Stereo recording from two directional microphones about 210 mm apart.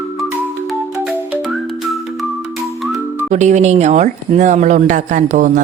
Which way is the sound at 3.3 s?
35° right (ahead or behind).